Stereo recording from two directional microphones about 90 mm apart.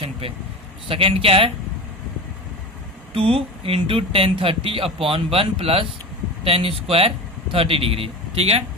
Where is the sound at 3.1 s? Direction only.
90° right.